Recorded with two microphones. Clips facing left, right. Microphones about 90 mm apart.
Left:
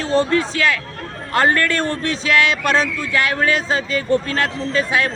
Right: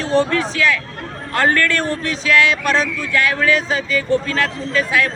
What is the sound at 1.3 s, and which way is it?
Speech, 20° left (ahead or behind).